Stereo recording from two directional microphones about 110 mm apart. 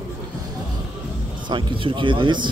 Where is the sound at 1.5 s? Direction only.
50° right (ahead or behind).